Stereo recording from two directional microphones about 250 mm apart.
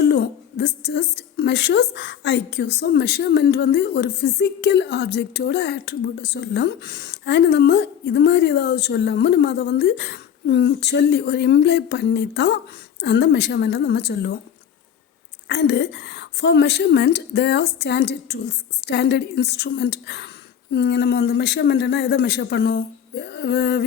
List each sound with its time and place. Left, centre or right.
0.0 s a woman's voice: left
15.4 s a woman's voice: left